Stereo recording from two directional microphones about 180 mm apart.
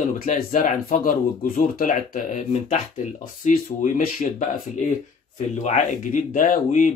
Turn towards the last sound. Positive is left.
turn(degrees=45)  # may be behind; listen again after turning